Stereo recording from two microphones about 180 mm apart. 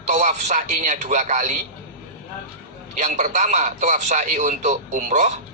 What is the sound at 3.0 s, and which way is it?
A man's voice, 45° right (ahead or behind).